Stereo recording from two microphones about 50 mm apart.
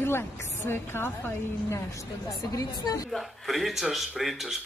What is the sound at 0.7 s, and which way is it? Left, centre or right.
A woman's voice, left.